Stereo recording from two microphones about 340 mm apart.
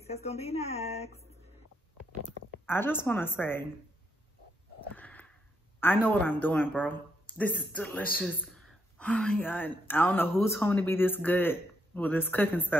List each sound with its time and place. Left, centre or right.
0.0 s speech: centre
2.6 s speech: centre
4.9 s a sound: centre
5.8 s speech: centre